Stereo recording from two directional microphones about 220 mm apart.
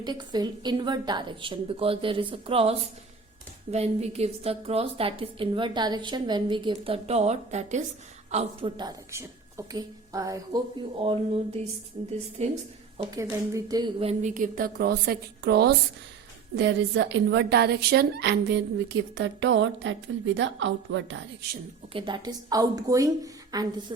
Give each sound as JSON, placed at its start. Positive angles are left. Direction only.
{"t": 0.0, "sound": "a woman's voice", "side_deg": -20}
{"t": 13.2, "sound": "a woman's voice", "side_deg": -15}
{"t": 21.9, "sound": "a woman's voice", "side_deg": -20}